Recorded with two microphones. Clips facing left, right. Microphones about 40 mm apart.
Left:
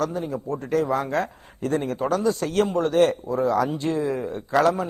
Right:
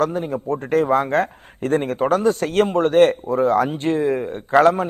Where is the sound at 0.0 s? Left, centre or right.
Right.